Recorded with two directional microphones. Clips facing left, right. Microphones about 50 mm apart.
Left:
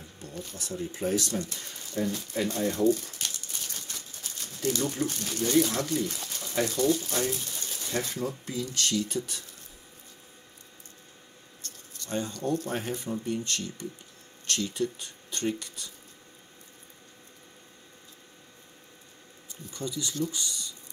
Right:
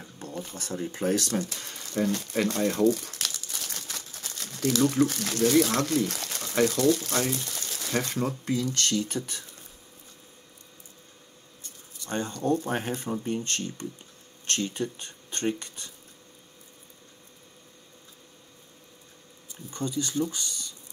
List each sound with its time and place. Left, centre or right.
0.3 s speech: right
0.6 s speech: right
1.1 s speech: right
1.5 s speech: right
7.9 s speech: right
11.6 s a sound: centre
12.1 s speech: right
19.7 s speech: right